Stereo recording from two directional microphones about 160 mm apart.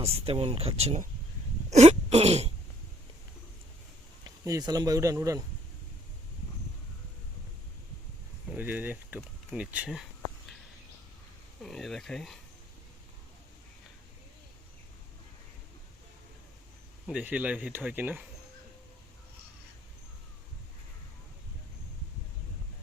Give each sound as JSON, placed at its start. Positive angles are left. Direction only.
{"t": 0.0, "sound": "speech", "side_deg": -35}
{"t": 1.7, "sound": "a sound", "side_deg": -45}
{"t": 4.4, "sound": "speech", "side_deg": -20}
{"t": 8.4, "sound": "speech", "side_deg": -10}
{"t": 11.6, "sound": "speech", "side_deg": 0}
{"t": 17.1, "sound": "speech", "side_deg": -10}